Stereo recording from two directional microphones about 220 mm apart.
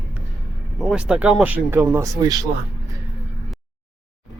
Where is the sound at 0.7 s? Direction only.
5° right (ahead or behind).